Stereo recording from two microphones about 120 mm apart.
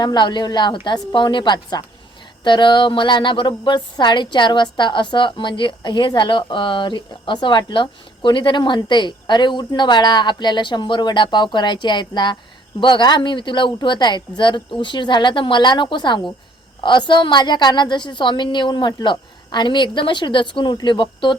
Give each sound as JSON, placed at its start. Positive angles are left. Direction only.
{"t": 0.0, "sound": "a woman's voice", "side_deg": 35}